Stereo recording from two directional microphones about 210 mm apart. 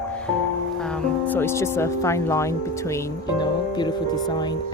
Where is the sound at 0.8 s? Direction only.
5° left (ahead or behind).